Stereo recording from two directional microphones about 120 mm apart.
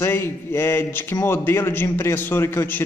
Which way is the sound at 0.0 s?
20° left (ahead or behind).